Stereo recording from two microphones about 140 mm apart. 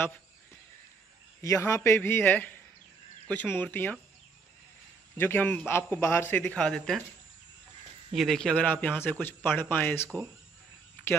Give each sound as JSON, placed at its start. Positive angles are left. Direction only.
{"t": 1.4, "sound": "a man's voice", "side_deg": 25}
{"t": 5.1, "sound": "a man's voice", "side_deg": 15}
{"t": 6.4, "sound": "speech", "side_deg": 5}
{"t": 8.1, "sound": "a man's voice", "side_deg": 0}